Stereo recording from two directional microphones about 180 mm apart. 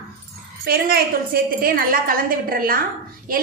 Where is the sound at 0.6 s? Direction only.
55° right (ahead or behind).